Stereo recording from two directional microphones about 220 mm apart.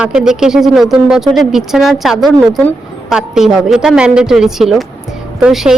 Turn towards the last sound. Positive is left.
turn(degrees=-5)  # may be behind; listen again after turning